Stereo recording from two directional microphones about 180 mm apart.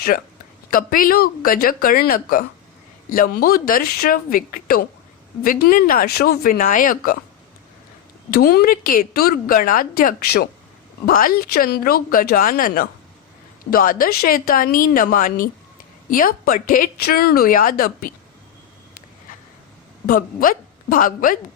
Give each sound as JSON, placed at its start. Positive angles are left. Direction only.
{"t": 0.7, "sound": "a woman's voice", "side_deg": 50}
{"t": 8.3, "sound": "a woman's voice", "side_deg": 60}
{"t": 20.1, "sound": "a woman's voice", "side_deg": 50}